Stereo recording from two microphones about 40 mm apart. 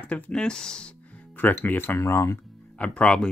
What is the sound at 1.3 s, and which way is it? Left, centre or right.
Speech, left.